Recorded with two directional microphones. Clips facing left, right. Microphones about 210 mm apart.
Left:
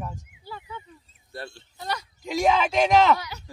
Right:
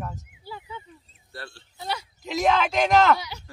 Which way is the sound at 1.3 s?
20° left (ahead or behind).